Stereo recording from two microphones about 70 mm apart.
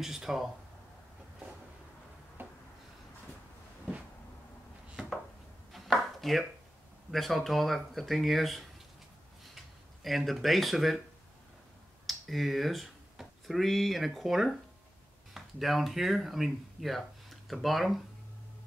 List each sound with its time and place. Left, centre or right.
0.0 s speech: centre
2.4 s a sound: right
5.7 s chopping: centre
7.1 s speech: centre
10.0 s speech: centre
12.1 s speech: centre